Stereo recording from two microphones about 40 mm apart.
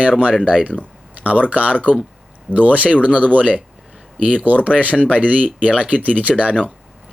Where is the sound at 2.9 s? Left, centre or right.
Left.